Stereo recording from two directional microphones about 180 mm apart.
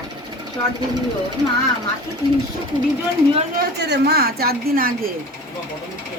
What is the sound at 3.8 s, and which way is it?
Speech, 70° right (ahead or behind).